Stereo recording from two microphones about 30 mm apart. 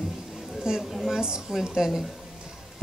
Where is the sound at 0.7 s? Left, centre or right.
Right.